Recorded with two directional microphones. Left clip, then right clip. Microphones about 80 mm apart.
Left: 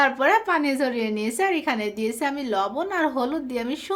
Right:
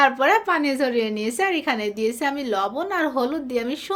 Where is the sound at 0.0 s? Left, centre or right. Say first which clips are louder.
Right 2 dB; right.